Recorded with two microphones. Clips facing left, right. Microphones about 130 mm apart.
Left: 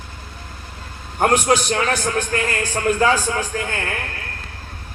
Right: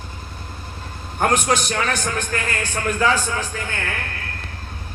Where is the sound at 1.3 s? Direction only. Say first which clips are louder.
Left 3 dB; 40° left (ahead or behind).